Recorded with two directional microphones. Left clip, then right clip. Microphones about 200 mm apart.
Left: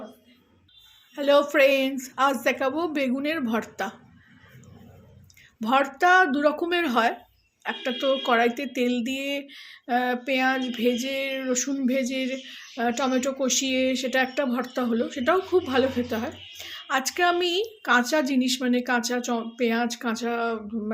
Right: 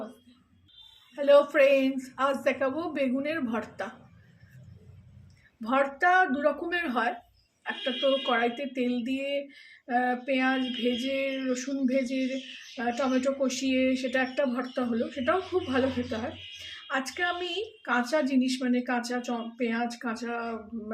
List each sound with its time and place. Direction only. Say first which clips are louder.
1.1 s speech: left 1 dB; 45° left (ahead or behind)
5.6 s speech: left 4 dB; 45° left (ahead or behind)